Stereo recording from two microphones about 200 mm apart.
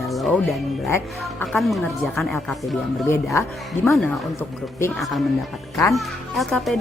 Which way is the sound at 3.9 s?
Centre (ahead or behind).